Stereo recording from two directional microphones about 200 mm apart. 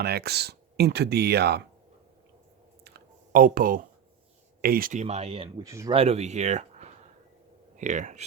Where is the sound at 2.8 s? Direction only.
50° right (ahead or behind).